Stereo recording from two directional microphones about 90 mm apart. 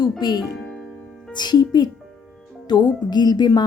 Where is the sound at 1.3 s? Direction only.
50° left (ahead or behind).